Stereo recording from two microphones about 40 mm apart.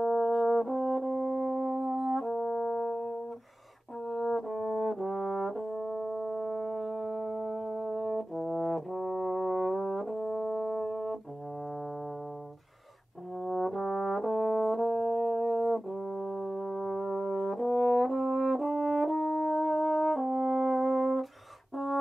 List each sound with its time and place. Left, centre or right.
0.0 s brass instrument: centre
2.3 s music: centre
4.1 s brass instrument: centre
10.2 s brass instrument: centre
13.4 s brass instrument: centre
21.7 s a sound: centre